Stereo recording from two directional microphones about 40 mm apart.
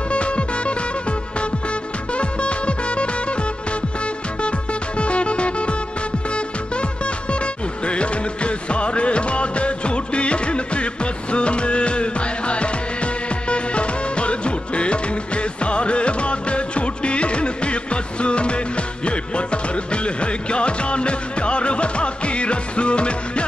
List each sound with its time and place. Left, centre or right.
0.1 s music: left
2.1 s music: left
4.4 s music: left